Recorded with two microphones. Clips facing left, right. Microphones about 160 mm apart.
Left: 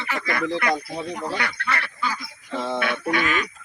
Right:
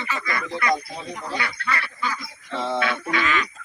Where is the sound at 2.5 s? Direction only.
10° left (ahead or behind).